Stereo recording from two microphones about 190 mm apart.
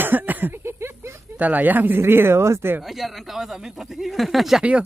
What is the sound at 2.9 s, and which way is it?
Speech, centre (ahead or behind).